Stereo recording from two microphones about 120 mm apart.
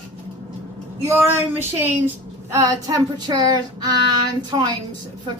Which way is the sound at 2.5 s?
30° right (ahead or behind).